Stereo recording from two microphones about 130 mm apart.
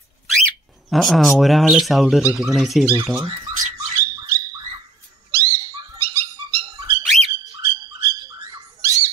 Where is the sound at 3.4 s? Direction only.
25° right (ahead or behind).